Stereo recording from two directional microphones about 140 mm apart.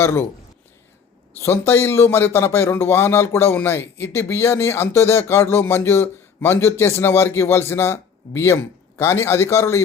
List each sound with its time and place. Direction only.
0.0 s a man's voice: 20° left (ahead or behind)
1.4 s a man's voice: 15° left (ahead or behind)